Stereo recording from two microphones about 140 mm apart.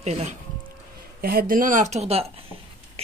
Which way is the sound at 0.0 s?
50° right (ahead or behind).